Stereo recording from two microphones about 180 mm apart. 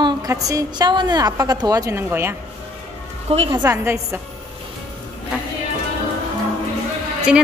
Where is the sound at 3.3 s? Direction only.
35° right (ahead or behind).